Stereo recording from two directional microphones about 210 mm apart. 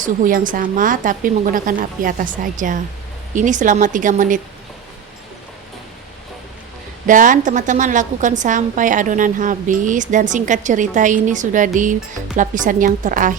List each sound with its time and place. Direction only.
0.0 s a woman's voice: 40° right (ahead or behind)
7.1 s a woman's voice: 40° right (ahead or behind)